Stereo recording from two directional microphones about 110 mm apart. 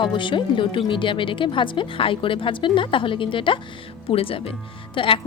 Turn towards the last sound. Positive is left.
turn(degrees=55)  # may be behind; listen again after turning